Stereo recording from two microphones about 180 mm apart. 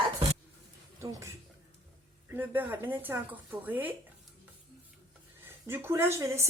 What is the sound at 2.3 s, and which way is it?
Speech, 10° right (ahead or behind).